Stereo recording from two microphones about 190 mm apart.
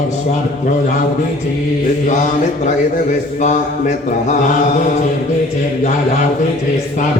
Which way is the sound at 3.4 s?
40° left (ahead or behind).